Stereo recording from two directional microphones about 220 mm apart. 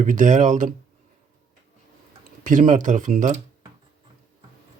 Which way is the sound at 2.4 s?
35° right (ahead or behind).